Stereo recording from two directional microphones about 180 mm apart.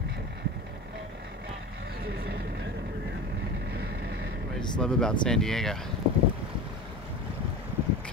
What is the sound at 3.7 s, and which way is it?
Vehicle, 60° right (ahead or behind).